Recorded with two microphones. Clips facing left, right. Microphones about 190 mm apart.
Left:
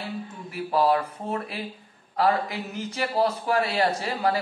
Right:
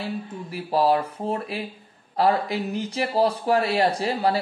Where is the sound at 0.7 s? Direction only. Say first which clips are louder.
Right 2 dB; 25° right (ahead or behind).